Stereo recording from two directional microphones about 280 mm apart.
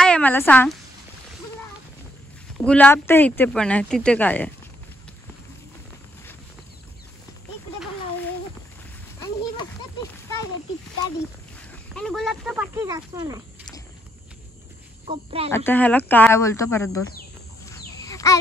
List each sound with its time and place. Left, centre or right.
0.0 s a woman's voice: centre
2.6 s speech: centre
11.9 s speech: centre
15.0 s speech: right
15.5 s speech: centre
17.6 s a sound: centre